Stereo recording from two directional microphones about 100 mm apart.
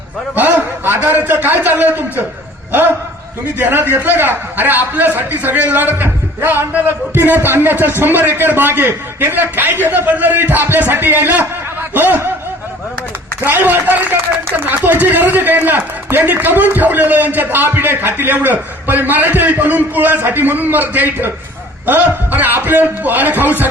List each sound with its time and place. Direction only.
0.3 s a man's voice: 20° right (ahead or behind)
3.6 s a man's voice: 20° right (ahead or behind)
13.4 s a man's voice: 20° right (ahead or behind)